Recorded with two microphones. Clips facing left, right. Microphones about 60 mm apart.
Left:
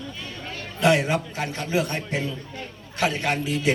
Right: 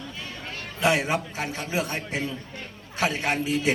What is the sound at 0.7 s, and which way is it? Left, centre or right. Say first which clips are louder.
A man's voice: left 3 dB; centre.